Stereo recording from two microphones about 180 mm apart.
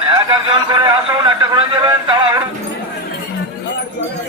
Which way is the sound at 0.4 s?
25° right (ahead or behind).